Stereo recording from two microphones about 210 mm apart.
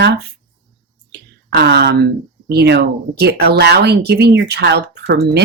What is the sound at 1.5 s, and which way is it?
Speech, 55° right (ahead or behind).